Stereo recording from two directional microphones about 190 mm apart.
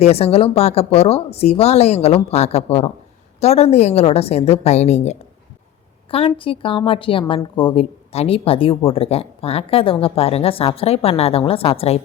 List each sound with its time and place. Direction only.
0.0 s a woman's voice: 30° left (ahead or behind)